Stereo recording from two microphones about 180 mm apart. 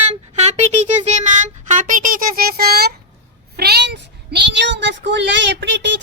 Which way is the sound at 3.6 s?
65° right (ahead or behind).